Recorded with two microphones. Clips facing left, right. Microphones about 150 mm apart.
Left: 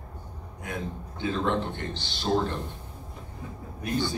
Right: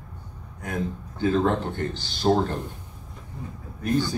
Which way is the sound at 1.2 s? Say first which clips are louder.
Right 5 dB; 40° right (ahead or behind).